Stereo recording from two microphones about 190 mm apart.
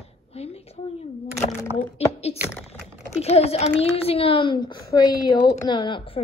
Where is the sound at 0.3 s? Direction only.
35° left (ahead or behind).